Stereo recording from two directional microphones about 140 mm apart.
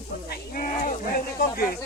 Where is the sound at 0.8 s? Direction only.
70° left (ahead or behind); by 1.8 s 90° left.